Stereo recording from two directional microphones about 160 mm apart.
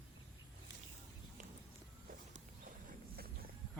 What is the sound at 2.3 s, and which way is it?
Horse, 55° right (ahead or behind).